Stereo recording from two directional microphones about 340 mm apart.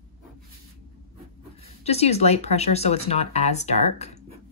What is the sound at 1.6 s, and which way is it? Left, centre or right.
Speech, centre.